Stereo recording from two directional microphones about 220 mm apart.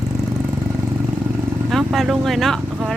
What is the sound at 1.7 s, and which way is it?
Speech, centre (ahead or behind).